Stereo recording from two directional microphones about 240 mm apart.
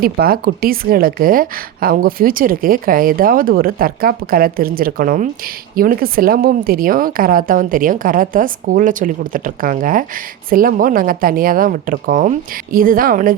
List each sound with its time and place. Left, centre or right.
0.0 s a woman's voice: right